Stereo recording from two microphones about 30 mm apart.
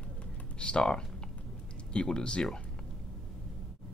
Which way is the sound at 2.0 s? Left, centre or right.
Left.